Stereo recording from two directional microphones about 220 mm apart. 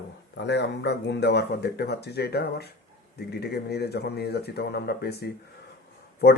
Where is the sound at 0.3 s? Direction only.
50° left (ahead or behind).